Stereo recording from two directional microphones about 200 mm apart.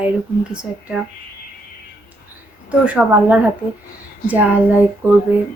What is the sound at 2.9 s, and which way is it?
A woman's voice, 5° right (ahead or behind).